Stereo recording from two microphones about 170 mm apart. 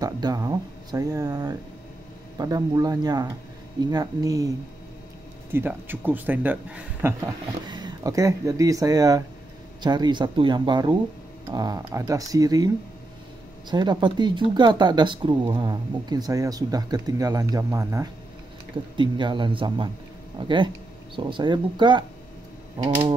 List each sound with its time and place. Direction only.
0.0 s speech: 20° right (ahead or behind)
5.5 s a man's voice: 10° right (ahead or behind)
7.6 s speech: 25° right (ahead or behind)